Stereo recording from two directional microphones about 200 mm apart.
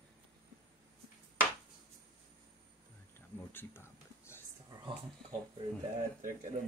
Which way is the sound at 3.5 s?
10° left (ahead or behind).